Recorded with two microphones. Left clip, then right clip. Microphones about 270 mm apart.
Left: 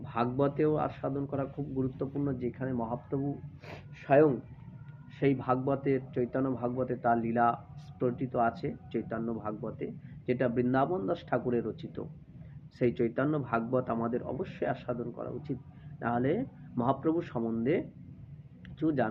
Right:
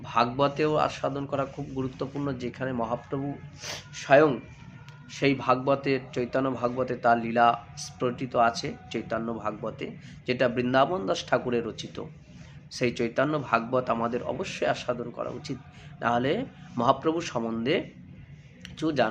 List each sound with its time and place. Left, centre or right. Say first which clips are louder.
0.0 s a man's voice: right 6 dB; centre